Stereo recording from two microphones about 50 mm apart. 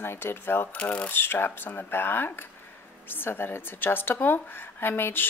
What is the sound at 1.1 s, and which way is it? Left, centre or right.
A woman's voice, left.